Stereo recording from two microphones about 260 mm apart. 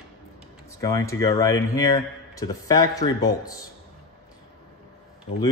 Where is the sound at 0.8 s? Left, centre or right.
Centre.